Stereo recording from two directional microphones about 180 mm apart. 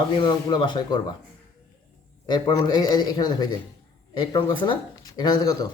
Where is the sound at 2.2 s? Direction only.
25° left (ahead or behind).